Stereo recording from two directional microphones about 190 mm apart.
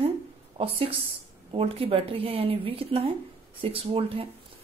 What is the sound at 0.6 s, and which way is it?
A woman's voice, 30° right (ahead or behind).